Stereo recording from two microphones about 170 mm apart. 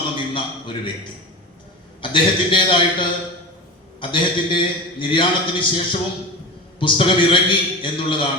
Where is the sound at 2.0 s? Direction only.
30° left (ahead or behind).